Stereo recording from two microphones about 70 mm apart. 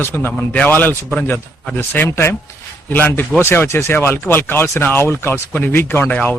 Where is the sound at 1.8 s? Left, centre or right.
Left.